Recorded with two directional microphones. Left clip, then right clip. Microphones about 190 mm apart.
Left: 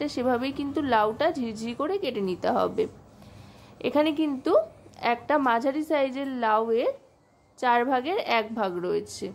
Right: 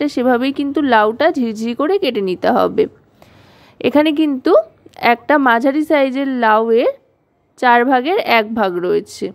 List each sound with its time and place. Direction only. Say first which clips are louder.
0.0 s a woman's voice: right 11 dB; 35° right (ahead or behind)